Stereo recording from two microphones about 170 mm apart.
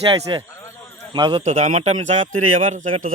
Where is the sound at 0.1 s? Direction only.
30° right (ahead or behind).